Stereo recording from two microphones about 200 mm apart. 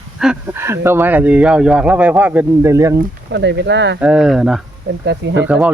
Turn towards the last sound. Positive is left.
turn(degrees=-65)  # may be behind; listen again after turning